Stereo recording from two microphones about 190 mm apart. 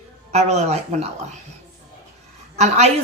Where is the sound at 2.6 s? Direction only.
35° right (ahead or behind).